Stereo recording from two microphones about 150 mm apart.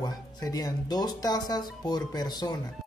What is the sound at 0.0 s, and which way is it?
Speech, 25° left (ahead or behind).